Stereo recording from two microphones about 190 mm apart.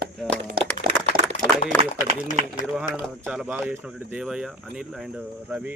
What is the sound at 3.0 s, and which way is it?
Speech, centre (ahead or behind).